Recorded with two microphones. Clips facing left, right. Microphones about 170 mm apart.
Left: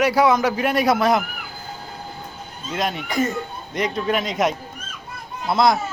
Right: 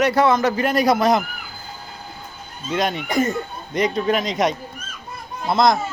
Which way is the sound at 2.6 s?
Centre (ahead or behind).